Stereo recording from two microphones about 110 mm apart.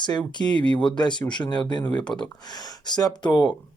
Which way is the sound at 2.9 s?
40° left (ahead or behind).